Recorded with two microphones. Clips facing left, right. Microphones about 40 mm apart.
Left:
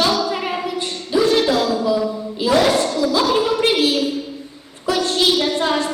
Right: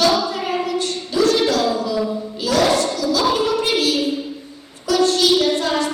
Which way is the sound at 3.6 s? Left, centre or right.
Left.